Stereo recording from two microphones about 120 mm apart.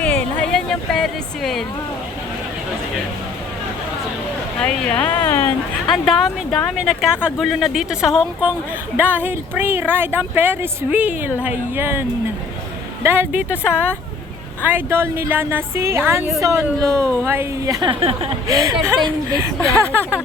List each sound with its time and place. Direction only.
0.0 s a sound: 10° left (ahead or behind)
4.6 s speech: 10° left (ahead or behind)
5.9 s speech: centre (ahead or behind); by 17.8 s 25° right (ahead or behind)
17.8 s speech: 50° right (ahead or behind)
18.4 s speech: 30° right (ahead or behind)